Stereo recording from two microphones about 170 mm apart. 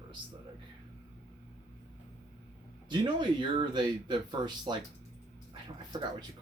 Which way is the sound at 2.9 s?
25° right (ahead or behind).